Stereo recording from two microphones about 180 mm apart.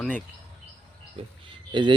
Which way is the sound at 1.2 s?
30° right (ahead or behind).